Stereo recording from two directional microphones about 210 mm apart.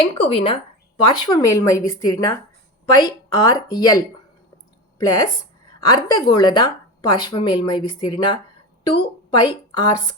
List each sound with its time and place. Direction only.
0.0 s a woman's voice: 25° left (ahead or behind)